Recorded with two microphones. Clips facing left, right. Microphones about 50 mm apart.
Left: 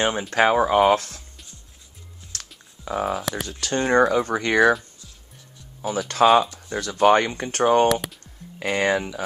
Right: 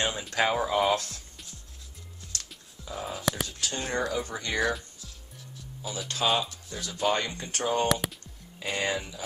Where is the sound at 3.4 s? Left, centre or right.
Left.